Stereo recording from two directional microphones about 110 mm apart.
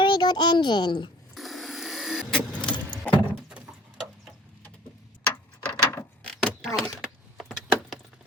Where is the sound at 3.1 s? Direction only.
15° left (ahead or behind).